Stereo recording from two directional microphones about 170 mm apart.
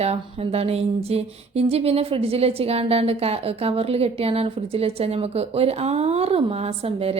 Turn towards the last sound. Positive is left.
turn(degrees=-35)  # may be behind; listen again after turning